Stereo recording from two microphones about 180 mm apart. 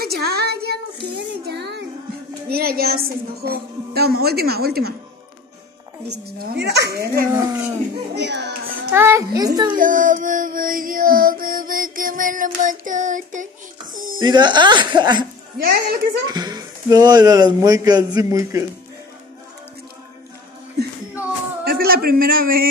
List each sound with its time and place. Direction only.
0.0 s child singing: 60° right (ahead or behind)
2.5 s a woman's voice: 60° right (ahead or behind)
6.0 s a child's voice: 65° right (ahead or behind)
7.3 s speech: 15° right (ahead or behind)
8.1 s speech: 70° right (ahead or behind)
8.9 s speech: 10° right (ahead or behind)
9.8 s music: 50° right (ahead or behind)
14.2 s speech: 25° right (ahead or behind)
15.5 s a woman's voice: 60° right (ahead or behind)
16.3 s speech: 20° right (ahead or behind)
21.6 s a man's voice: 55° right (ahead or behind)